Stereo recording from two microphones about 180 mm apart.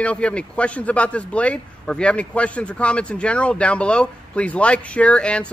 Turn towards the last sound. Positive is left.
turn(degrees=5)  # may be behind; listen again after turning